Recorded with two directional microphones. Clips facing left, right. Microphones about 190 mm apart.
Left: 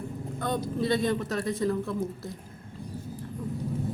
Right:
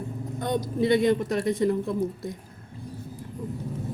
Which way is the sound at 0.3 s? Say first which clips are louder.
Right 3 dB; 20° right (ahead or behind).